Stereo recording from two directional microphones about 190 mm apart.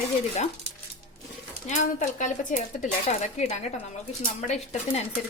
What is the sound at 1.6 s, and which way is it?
Speech, 40° left (ahead or behind).